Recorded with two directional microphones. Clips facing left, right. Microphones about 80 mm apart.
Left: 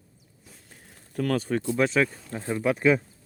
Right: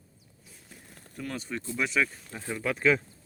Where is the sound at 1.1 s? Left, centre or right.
Left.